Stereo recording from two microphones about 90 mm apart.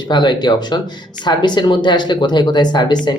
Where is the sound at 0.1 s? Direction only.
60° left (ahead or behind).